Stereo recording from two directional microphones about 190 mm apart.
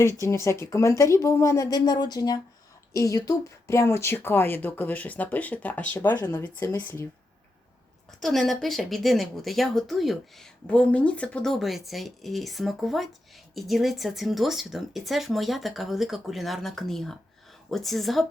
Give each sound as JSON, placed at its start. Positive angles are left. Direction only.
{"t": 0.0, "sound": "speech", "side_deg": 15}
{"t": 6.1, "sound": "speech", "side_deg": 20}
{"t": 8.2, "sound": "speech", "side_deg": 0}